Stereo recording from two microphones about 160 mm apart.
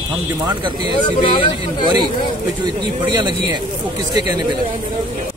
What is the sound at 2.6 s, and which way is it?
Speech, 25° right (ahead or behind).